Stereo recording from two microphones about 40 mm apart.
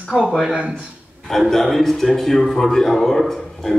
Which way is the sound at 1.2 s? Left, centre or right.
Centre.